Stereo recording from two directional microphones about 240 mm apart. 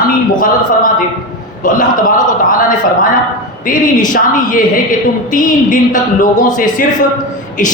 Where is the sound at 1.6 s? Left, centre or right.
Left.